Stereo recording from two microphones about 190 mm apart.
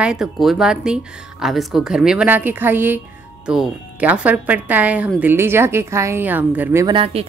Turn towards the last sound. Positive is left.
turn(degrees=-30)  # may be behind; listen again after turning